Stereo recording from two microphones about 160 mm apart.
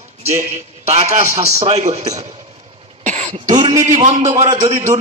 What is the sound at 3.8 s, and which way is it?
Speech, 50° right (ahead or behind).